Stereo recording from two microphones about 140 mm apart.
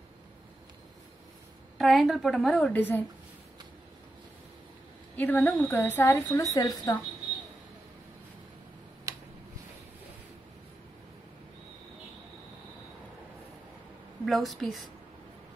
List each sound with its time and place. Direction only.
1.8 s a woman's voice: centre (ahead or behind)
5.1 s a woman's voice: 10° left (ahead or behind)
6.4 s speech: 25° left (ahead or behind)
9.1 s a sound: 25° right (ahead or behind)
14.2 s a woman's voice: centre (ahead or behind)